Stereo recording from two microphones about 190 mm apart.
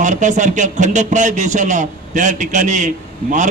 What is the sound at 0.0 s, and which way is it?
A man's voice, 40° right (ahead or behind).